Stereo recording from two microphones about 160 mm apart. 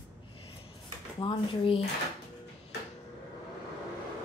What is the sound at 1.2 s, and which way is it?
Speech, 30° left (ahead or behind).